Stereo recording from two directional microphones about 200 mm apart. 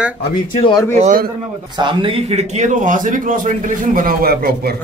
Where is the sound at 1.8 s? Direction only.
25° right (ahead or behind).